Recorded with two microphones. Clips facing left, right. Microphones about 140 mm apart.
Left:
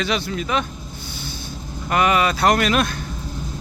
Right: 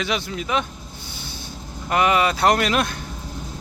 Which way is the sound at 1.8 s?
20° right (ahead or behind).